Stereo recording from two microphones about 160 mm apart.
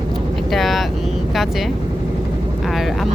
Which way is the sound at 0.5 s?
Centre (ahead or behind).